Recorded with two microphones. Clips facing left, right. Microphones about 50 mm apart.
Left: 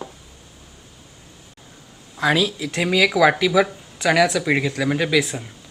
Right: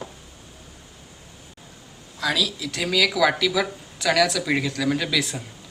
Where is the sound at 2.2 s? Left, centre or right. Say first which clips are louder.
Left 5 dB; left; by 5.5 s centre.